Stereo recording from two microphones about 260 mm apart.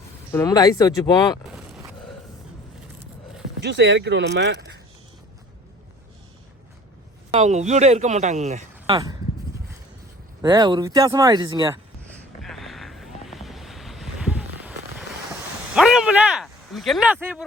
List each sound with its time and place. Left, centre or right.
0.3 s speech: centre
3.6 s speech: right
7.3 s a man's voice: right
10.4 s speech: centre
12.4 s boat: centre
15.7 s speech: centre